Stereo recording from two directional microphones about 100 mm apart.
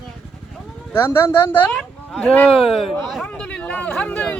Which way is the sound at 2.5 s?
70° left (ahead or behind).